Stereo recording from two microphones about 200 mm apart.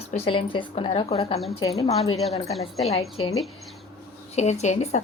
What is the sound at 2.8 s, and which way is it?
Speech, 30° left (ahead or behind).